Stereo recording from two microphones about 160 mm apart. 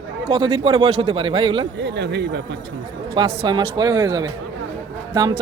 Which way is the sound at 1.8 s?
90° right.